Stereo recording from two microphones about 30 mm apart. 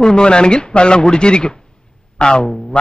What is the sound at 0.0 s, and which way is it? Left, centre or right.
A woman's voice, left.